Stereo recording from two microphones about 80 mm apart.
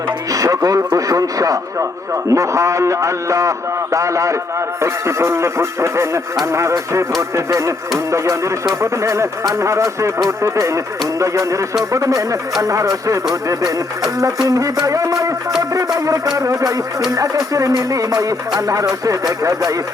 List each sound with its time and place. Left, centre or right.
0.3 s a man's voice: right
12.6 s music: right